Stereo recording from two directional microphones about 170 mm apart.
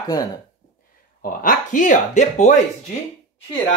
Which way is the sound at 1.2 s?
50° left (ahead or behind).